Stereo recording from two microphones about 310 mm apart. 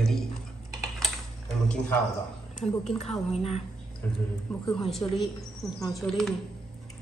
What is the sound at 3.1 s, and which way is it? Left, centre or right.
Speech, centre.